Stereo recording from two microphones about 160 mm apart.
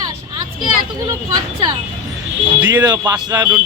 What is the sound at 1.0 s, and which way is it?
Speech, 25° right (ahead or behind).